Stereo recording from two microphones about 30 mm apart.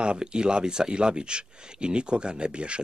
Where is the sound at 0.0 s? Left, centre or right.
Right.